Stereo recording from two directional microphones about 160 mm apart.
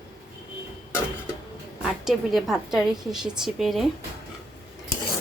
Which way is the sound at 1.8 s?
Centre (ahead or behind).